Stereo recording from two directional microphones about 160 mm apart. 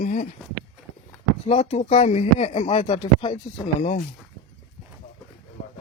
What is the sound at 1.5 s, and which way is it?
Speech, 40° left (ahead or behind).